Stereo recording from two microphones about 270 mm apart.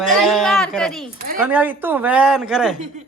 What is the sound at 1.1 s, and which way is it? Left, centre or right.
Speech, right.